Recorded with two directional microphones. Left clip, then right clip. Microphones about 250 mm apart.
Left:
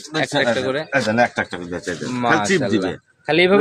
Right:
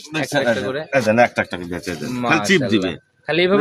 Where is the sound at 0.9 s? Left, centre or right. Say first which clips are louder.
Right 4 dB; right.